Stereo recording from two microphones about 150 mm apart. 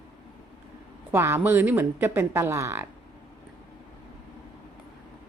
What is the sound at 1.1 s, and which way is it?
A woman's voice, 15° right (ahead or behind).